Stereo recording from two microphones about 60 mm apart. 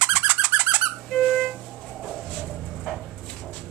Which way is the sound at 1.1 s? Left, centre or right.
Centre.